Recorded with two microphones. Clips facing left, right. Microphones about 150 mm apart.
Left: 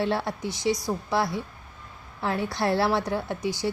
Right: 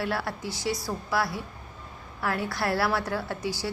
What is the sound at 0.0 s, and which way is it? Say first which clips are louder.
A woman's voice: left 4 dB; 25° left (ahead or behind).